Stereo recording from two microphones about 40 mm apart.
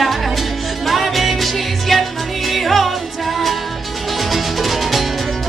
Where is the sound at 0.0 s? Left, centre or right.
Centre.